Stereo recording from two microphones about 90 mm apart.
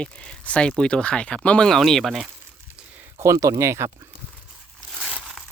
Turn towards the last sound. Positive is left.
turn(degrees=0)  # may be behind; listen again after turning